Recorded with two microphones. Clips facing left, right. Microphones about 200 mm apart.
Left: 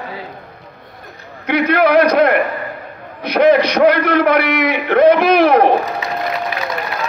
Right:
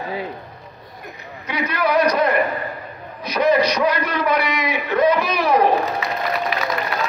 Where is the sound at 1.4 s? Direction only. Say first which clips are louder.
Left 9 dB; 60° left (ahead or behind).